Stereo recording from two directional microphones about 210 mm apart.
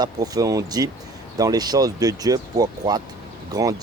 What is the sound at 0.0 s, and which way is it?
Speech, 20° right (ahead or behind).